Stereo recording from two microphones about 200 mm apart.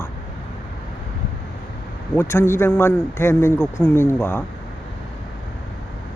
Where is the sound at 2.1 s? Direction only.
10° left (ahead or behind).